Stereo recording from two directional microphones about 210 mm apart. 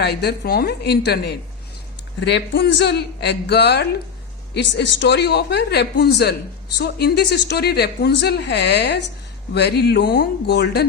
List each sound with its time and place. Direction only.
0.0 s a woman's voice: 50° left (ahead or behind)